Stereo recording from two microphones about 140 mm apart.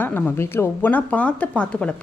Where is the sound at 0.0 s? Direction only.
15° left (ahead or behind).